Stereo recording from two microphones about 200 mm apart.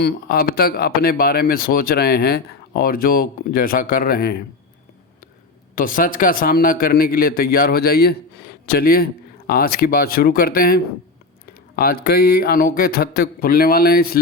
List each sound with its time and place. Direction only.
0.0 s speech: 50° left (ahead or behind)
5.7 s speech: 45° left (ahead or behind)
11.8 s speech: 50° left (ahead or behind)